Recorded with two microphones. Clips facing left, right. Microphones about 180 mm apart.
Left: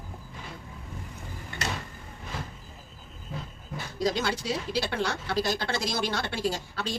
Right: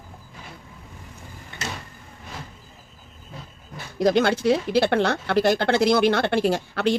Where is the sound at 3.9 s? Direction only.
60° right (ahead or behind).